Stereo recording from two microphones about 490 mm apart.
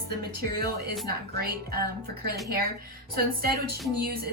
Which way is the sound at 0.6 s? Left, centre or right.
Centre.